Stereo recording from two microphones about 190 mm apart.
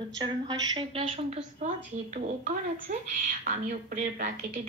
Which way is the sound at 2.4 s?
45° right (ahead or behind).